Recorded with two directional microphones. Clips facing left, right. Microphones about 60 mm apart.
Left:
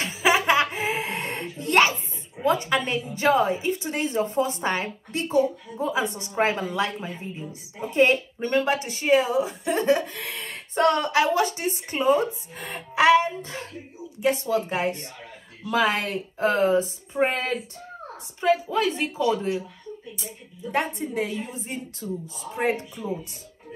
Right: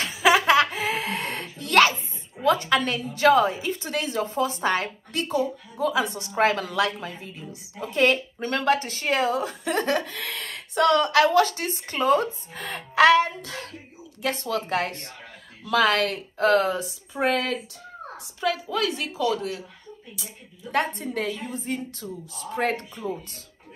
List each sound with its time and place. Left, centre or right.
0.0 s a sound: left
2.4 s speech: left
21.0 s a woman's voice: centre